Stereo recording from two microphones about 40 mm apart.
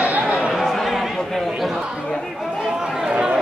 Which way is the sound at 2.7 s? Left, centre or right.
Centre.